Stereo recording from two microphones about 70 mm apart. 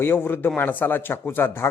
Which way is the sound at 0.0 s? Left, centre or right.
Left.